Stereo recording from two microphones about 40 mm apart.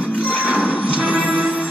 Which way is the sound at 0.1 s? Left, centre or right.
Left.